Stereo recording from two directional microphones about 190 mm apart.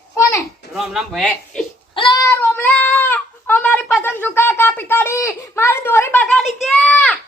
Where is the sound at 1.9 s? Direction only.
25° left (ahead or behind); by 7.2 s centre (ahead or behind).